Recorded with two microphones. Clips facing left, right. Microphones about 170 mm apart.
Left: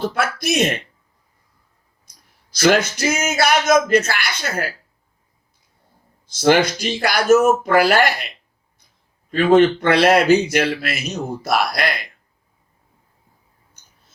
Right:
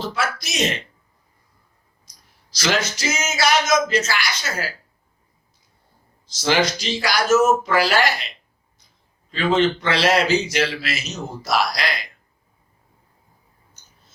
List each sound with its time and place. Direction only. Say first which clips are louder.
0.0 s a man's voice: left 4 dB; 55° left (ahead or behind)
2.1 s a sound: left 1 dB; 55° left (ahead or behind)
2.5 s a man's voice: left 7 dB; 55° left (ahead or behind)
6.2 s a man's voice: left 5 dB; 55° left (ahead or behind)
9.3 s a man's voice: left 6 dB; 50° left (ahead or behind)